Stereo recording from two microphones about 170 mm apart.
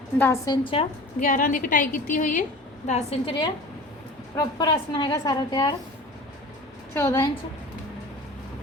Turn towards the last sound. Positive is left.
turn(degrees=20)  # may be behind; listen again after turning